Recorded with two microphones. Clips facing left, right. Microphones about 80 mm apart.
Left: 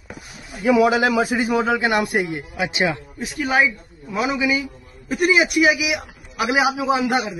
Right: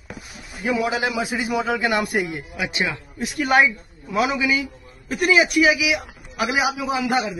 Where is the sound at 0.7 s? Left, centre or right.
Left.